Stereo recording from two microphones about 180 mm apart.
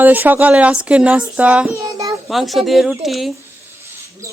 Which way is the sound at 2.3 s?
Centre (ahead or behind).